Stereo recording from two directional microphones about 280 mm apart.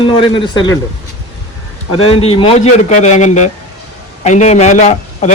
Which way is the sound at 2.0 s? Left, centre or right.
Centre.